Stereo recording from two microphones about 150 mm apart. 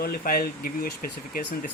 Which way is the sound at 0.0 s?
80° left.